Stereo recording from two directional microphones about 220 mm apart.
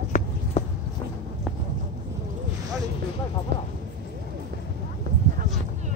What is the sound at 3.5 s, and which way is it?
Speech, 50° right (ahead or behind).